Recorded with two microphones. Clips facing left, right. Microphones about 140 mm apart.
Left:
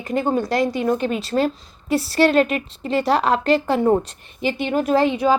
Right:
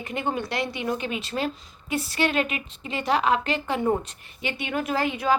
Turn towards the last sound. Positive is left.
turn(degrees=20)  # may be behind; listen again after turning